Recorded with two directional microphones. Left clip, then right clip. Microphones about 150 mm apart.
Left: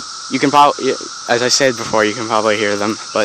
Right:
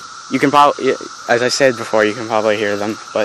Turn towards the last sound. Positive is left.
turn(degrees=20)  # may be behind; listen again after turning